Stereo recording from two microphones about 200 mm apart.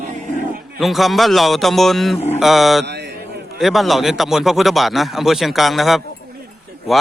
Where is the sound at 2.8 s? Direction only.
55° right (ahead or behind).